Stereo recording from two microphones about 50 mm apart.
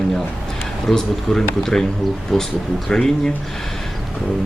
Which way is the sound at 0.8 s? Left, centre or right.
Centre.